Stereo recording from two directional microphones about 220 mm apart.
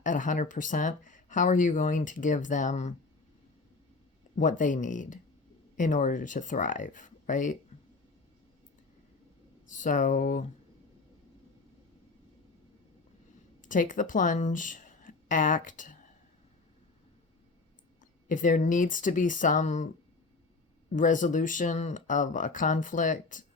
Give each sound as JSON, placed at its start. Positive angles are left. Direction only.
{"t": 0.0, "sound": "speech", "side_deg": 35}
{"t": 4.4, "sound": "speech", "side_deg": 35}
{"t": 9.6, "sound": "speech", "side_deg": 35}
{"t": 13.6, "sound": "speech", "side_deg": 35}
{"t": 18.3, "sound": "speech", "side_deg": 35}
{"t": 20.9, "sound": "speech", "side_deg": 35}